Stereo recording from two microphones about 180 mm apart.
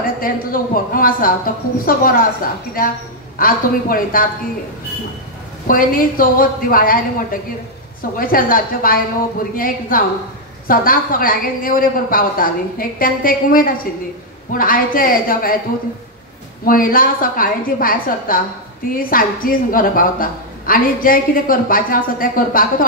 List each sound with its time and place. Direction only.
0.0 s a woman's voice: 50° left (ahead or behind)
5.7 s a woman's voice: 50° left (ahead or behind)
8.0 s a woman's voice: 50° left (ahead or behind)
16.6 s a woman's voice: 50° left (ahead or behind)